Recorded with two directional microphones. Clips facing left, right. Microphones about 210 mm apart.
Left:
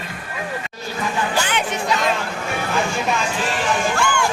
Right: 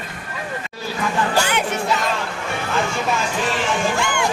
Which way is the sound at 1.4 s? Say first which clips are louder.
Right 2 dB; 10° right (ahead or behind).